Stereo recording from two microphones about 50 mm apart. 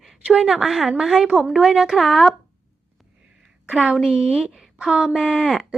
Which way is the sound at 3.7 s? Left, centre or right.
Right.